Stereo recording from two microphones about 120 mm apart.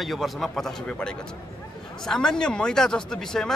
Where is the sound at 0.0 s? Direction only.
Centre (ahead or behind).